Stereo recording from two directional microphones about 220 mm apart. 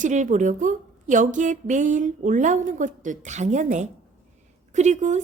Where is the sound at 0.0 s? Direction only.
35° right (ahead or behind).